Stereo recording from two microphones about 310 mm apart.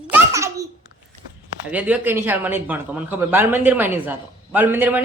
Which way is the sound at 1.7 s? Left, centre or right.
Centre.